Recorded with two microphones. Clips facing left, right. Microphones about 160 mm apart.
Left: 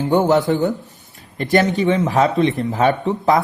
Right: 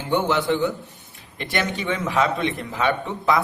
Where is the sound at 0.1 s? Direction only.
40° left (ahead or behind).